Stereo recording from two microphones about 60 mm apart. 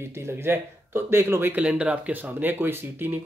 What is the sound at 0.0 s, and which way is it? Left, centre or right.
A man's voice, right.